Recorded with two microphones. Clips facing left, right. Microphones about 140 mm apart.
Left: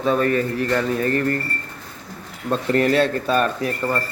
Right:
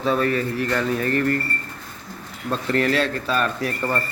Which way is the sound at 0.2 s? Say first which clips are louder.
Left 2 dB; 40° left (ahead or behind).